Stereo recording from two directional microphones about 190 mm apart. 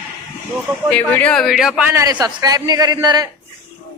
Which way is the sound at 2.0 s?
20° right (ahead or behind).